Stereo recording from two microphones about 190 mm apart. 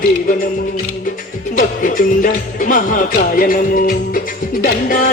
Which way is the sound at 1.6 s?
45° left (ahead or behind).